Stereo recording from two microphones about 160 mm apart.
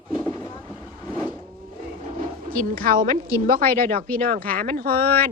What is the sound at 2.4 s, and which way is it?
Speech, 60° right (ahead or behind).